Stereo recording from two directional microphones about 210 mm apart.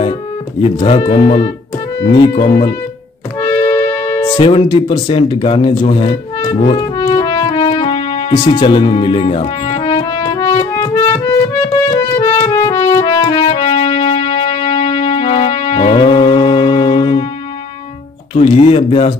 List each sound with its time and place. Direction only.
0.6 s speech: 25° left (ahead or behind)
3.3 s music: 15° left (ahead or behind)
18.3 s speech: 25° left (ahead or behind)